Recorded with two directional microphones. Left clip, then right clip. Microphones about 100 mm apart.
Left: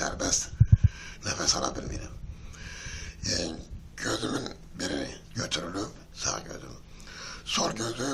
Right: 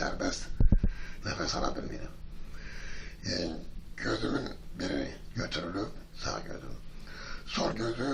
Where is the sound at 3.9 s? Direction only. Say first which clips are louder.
Left 2 dB; 20° left (ahead or behind).